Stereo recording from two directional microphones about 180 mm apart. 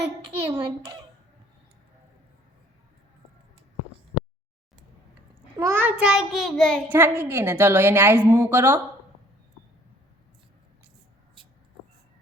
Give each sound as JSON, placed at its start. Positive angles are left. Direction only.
{"t": 0.4, "sound": "a child's voice", "side_deg": -20}
{"t": 5.5, "sound": "child singing", "side_deg": -15}
{"t": 6.9, "sound": "a woman's voice", "side_deg": -10}